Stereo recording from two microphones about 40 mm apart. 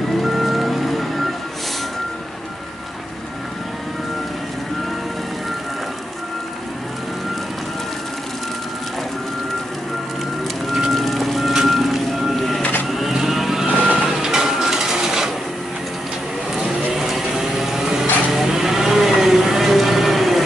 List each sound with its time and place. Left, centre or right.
0.2 s vehicle: centre
10.9 s music: centre
12.8 s vehicle: centre
16.5 s vehicle: centre